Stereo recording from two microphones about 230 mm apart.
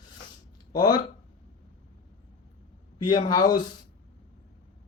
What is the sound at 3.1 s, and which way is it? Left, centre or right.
Speech, centre.